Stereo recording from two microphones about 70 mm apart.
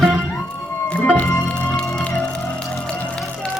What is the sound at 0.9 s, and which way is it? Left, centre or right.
Music, left.